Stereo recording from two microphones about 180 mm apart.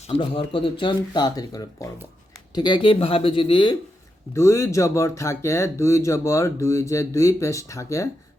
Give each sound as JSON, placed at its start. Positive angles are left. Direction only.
{"t": 0.1, "sound": "speech", "side_deg": 30}
{"t": 4.4, "sound": "speech", "side_deg": 15}